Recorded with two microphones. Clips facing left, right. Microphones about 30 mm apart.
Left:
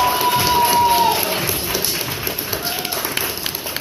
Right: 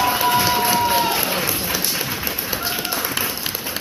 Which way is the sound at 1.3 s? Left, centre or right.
Left.